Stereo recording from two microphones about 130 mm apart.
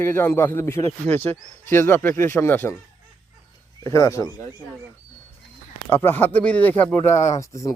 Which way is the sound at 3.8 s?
25° left (ahead or behind).